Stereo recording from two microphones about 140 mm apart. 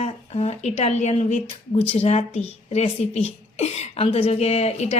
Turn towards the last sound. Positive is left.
turn(degrees=50)  # may be behind; listen again after turning